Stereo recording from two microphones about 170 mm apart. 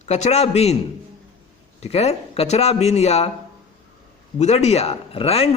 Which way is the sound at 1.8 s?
40° left (ahead or behind).